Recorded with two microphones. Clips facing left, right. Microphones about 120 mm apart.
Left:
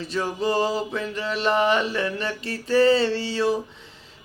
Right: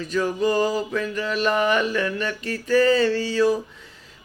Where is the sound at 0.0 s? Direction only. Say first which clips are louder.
Right 3 dB; 30° left (ahead or behind).